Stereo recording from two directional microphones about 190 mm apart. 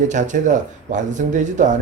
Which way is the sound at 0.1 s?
40° right (ahead or behind).